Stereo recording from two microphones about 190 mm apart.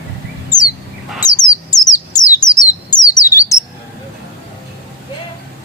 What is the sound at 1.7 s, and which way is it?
Bird, 20° left (ahead or behind).